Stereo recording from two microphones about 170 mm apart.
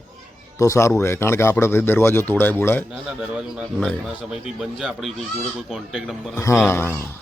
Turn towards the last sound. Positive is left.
turn(degrees=15)  # may be behind; listen again after turning